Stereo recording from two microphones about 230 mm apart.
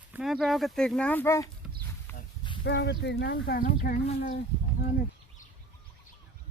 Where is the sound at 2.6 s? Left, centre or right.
Left.